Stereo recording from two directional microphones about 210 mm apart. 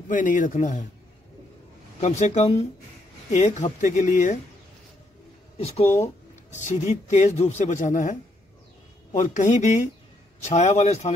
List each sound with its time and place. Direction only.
0.1 s speech: 40° left (ahead or behind)
2.0 s speech: 35° left (ahead or behind)
6.5 s speech: 35° left (ahead or behind)